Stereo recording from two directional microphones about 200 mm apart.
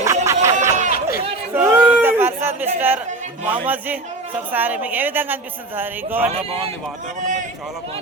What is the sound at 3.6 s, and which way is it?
A woman's voice, 10° right (ahead or behind).